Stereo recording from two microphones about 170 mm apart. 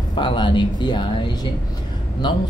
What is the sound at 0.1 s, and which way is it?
Speech, 30° left (ahead or behind).